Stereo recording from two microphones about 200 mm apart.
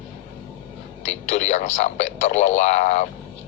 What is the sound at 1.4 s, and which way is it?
A man's voice, 35° left (ahead or behind).